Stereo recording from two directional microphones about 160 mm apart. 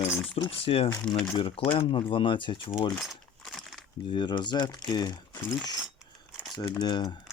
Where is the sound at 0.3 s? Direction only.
35° left (ahead or behind).